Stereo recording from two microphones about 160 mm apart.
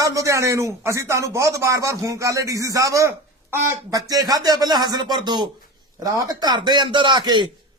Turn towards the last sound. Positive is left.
turn(degrees=-30)  # may be behind; listen again after turning